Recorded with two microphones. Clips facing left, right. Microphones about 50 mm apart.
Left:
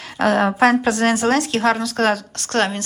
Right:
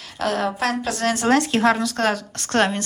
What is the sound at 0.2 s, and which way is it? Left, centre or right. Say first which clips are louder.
Speech: left 7 dB; left.